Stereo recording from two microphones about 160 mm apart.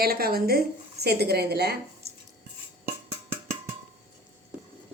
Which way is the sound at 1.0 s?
85° right.